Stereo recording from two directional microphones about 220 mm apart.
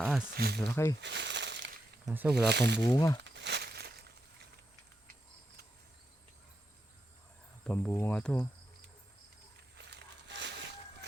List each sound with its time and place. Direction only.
0.0 s speech: 5° right (ahead or behind)
0.3 s speech: 45° right (ahead or behind)
0.6 s speech: 10° left (ahead or behind)
1.0 s crumpling: 50° right (ahead or behind)
2.0 s speech: 5° right (ahead or behind)
2.3 s speech: 50° right (ahead or behind)
2.8 s speech: 15° left (ahead or behind)
3.2 s crumpling: 50° right (ahead or behind)
7.7 s speech: 10° left (ahead or behind)
9.7 s a sound: 50° right (ahead or behind)